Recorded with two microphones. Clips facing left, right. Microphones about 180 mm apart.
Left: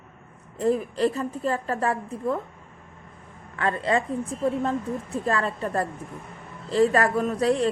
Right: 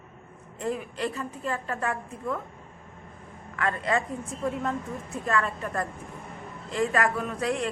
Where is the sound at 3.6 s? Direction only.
30° left (ahead or behind).